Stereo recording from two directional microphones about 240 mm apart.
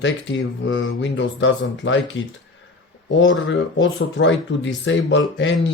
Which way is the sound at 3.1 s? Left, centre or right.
Left.